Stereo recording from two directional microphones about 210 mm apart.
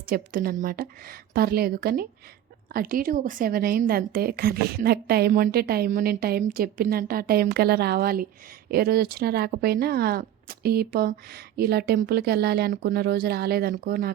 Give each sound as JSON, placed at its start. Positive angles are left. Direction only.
{"t": 0.1, "sound": "a woman's voice", "side_deg": -45}